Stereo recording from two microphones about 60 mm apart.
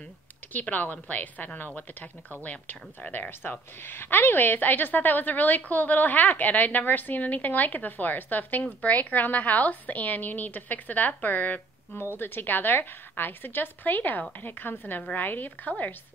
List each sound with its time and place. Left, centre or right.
0.5 s a woman's voice: left